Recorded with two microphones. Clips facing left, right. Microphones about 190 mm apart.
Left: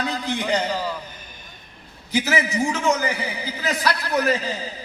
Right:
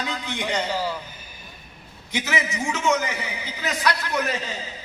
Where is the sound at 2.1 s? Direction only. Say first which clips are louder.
Left 5 dB; 35° left (ahead or behind).